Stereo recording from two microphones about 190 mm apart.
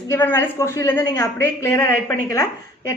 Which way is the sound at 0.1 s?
10° left (ahead or behind).